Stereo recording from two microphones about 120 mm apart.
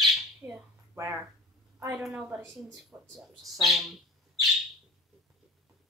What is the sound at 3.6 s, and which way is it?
Bird, centre (ahead or behind).